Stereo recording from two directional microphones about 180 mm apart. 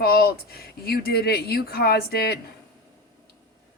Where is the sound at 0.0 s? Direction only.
60° left (ahead or behind).